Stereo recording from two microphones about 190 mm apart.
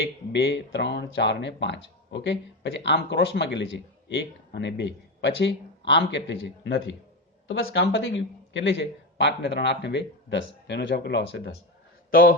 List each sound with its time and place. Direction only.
0.3 s a man's voice: 70° left (ahead or behind)
7.4 s a man's voice: 85° left; by 11.5 s 65° left (ahead or behind)